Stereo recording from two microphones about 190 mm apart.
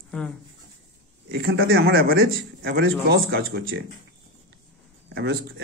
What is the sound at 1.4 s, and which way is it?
A man's voice, 90° right.